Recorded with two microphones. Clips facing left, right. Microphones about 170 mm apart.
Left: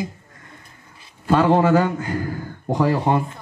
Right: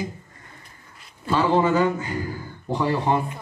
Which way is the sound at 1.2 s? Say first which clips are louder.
Left 4 dB; 60° left (ahead or behind).